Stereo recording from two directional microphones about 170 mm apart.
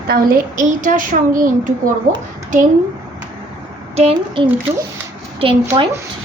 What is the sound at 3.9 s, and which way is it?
Speech, 35° right (ahead or behind).